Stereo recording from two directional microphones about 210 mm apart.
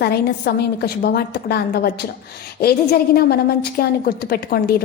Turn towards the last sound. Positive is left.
turn(degrees=50)  # may be behind; listen again after turning